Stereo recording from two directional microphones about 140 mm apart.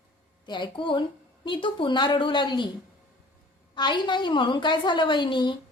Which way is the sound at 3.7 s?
30° left (ahead or behind).